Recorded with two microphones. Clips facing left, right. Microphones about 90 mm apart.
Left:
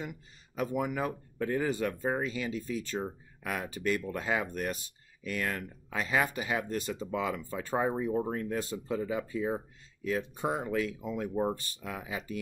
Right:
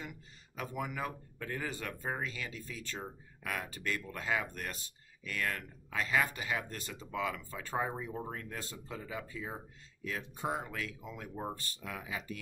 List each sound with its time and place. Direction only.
0.6 s speech: 15° left (ahead or behind)